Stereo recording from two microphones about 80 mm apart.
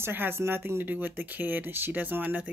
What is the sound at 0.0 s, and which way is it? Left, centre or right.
Speech, right.